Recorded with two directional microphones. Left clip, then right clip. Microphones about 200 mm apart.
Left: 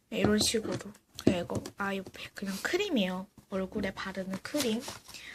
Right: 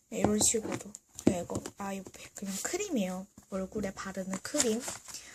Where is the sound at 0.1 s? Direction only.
10° right (ahead or behind).